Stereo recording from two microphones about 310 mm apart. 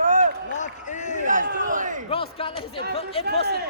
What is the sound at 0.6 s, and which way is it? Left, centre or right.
Run, left.